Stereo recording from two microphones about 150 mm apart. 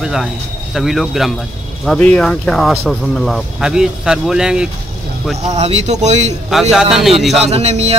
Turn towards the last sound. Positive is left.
turn(degrees=-45)  # may be behind; listen again after turning